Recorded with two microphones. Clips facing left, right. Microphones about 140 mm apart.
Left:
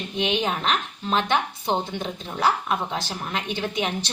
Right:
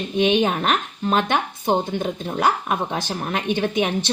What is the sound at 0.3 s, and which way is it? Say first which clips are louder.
A woman's voice: right 4 dB; 50° right (ahead or behind).